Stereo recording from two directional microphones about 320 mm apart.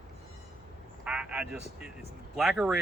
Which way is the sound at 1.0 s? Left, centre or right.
Centre.